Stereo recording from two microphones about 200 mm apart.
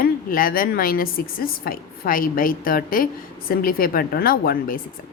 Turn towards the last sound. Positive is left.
turn(degrees=45)  # may be behind; listen again after turning